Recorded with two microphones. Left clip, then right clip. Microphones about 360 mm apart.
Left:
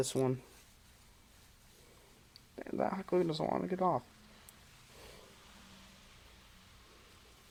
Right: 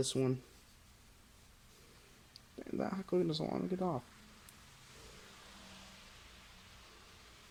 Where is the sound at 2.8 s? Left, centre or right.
Left.